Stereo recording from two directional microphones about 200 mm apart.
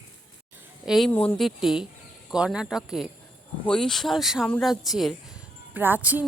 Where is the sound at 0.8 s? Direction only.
Centre (ahead or behind).